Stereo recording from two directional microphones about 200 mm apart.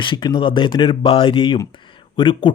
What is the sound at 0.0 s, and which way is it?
Speech, 20° left (ahead or behind).